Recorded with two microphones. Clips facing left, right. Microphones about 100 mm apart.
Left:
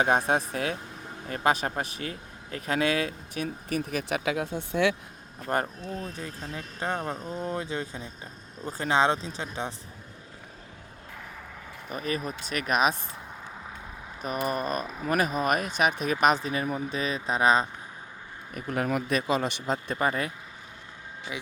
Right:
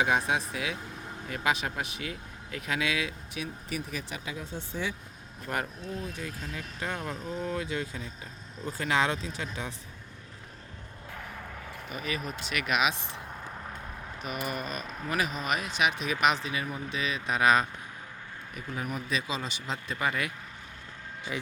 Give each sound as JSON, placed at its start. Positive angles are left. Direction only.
{"t": 0.0, "sound": "a man's voice", "side_deg": 40}
{"t": 5.5, "sound": "speech", "side_deg": 35}
{"t": 11.9, "sound": "speech", "side_deg": 40}
{"t": 14.3, "sound": "a man's voice", "side_deg": 40}
{"t": 18.5, "sound": "speech", "side_deg": 65}
{"t": 19.1, "sound": "a man's voice", "side_deg": 55}
{"t": 21.3, "sound": "speech", "side_deg": 10}